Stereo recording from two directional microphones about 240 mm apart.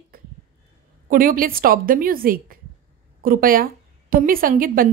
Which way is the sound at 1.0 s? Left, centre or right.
Right.